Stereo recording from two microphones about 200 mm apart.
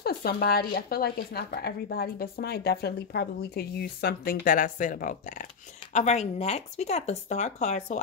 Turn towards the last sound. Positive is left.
turn(degrees=35)  # may be behind; listen again after turning